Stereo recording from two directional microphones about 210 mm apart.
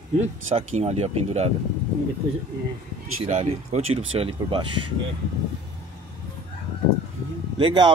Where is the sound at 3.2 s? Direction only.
30° right (ahead or behind).